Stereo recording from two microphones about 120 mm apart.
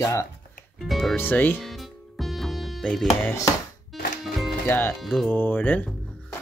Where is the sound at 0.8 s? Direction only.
Centre (ahead or behind).